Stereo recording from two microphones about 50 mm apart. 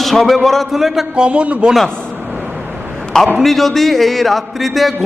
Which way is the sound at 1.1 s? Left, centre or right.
Right.